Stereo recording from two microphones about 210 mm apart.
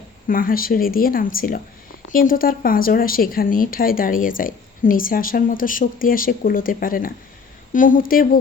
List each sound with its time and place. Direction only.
0.3 s speech: 40° left (ahead or behind)